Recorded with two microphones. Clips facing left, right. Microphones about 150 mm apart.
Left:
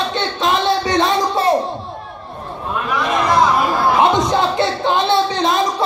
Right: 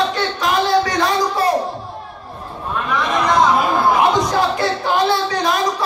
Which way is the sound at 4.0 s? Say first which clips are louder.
Left 1 dB; 25° left (ahead or behind).